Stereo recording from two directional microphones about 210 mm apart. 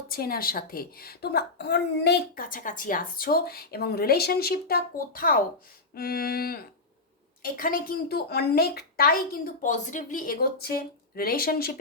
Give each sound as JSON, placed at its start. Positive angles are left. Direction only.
{"t": 0.1, "sound": "a woman's voice", "side_deg": 45}